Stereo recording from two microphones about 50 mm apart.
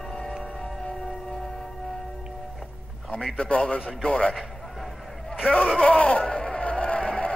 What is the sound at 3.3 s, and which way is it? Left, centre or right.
A man's voice, left.